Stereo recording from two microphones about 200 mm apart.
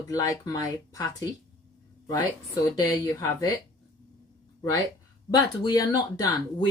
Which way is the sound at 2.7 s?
20° left (ahead or behind).